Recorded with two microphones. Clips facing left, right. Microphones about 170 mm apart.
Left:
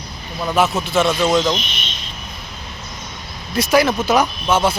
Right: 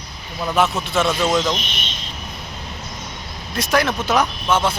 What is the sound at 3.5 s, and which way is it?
Speech, 5° left (ahead or behind).